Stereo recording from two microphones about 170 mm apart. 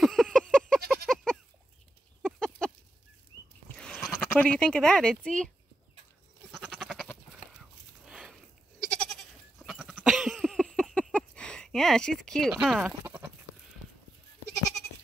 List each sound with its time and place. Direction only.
0.0 s a sound: centre (ahead or behind)
2.2 s chicken: 5° left (ahead or behind)
3.6 s speech: 5° left (ahead or behind)
6.5 s sheep: centre (ahead or behind)
8.0 s a sound: centre (ahead or behind)
8.9 s goat: 5° left (ahead or behind)
13.0 s sheep: 15° right (ahead or behind)